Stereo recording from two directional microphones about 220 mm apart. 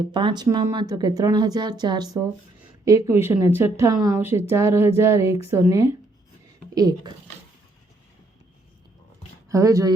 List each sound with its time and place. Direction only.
0.0 s speech: 25° right (ahead or behind)
9.5 s speech: 15° right (ahead or behind)